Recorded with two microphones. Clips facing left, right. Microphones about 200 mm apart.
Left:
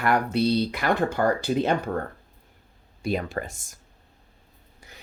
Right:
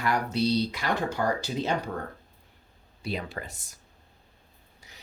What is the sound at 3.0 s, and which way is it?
Speech, 50° left (ahead or behind).